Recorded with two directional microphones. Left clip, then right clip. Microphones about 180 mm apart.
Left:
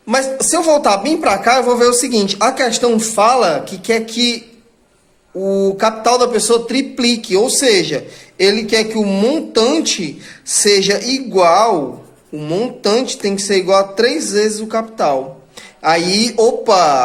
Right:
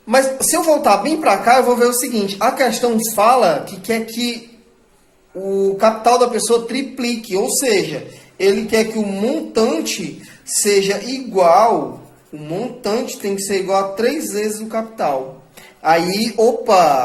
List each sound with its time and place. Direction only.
0.1 s speech: 25° left (ahead or behind)
5.5 s speech: 35° left (ahead or behind)